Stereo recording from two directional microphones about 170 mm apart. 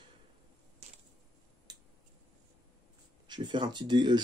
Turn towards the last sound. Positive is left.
turn(degrees=-25)  # may be behind; listen again after turning